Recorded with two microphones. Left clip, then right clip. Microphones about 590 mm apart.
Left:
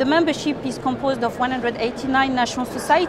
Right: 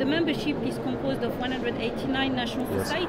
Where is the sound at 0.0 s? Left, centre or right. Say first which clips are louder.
Left 7 dB; left.